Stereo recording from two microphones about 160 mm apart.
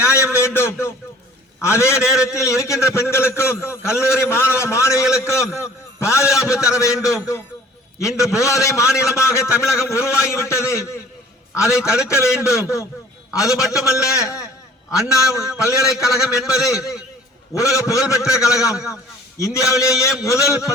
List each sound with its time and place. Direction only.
0.0 s a man's voice: 15° left (ahead or behind)
11.6 s a man's voice: 5° right (ahead or behind)
12.0 s a man's voice: 15° left (ahead or behind)
13.3 s a man's voice: 5° right (ahead or behind)
15.1 s a man's voice: 20° left (ahead or behind)
16.0 s a man's voice: centre (ahead or behind)
17.5 s a man's voice: 20° left (ahead or behind)